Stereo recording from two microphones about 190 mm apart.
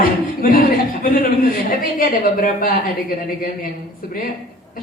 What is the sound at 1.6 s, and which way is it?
A man's voice, 50° left (ahead or behind).